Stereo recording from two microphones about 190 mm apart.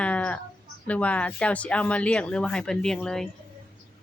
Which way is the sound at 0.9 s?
5° left (ahead or behind).